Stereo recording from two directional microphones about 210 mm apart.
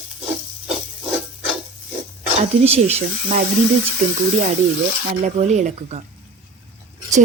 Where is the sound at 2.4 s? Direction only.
30° right (ahead or behind).